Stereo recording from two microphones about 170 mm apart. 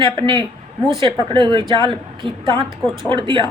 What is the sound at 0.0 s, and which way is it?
A woman's voice, 30° right (ahead or behind).